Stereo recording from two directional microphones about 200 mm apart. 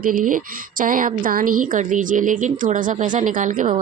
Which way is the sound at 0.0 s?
45° right (ahead or behind).